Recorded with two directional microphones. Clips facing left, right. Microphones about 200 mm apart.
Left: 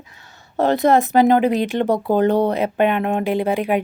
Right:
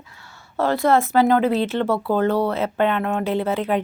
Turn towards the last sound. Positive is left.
turn(degrees=15)  # may be behind; listen again after turning